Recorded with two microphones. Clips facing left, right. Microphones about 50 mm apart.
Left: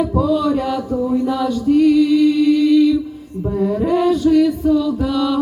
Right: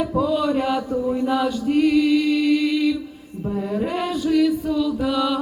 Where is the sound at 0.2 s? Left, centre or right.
Centre.